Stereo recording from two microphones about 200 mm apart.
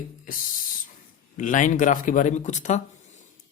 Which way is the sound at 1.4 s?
40° left (ahead or behind).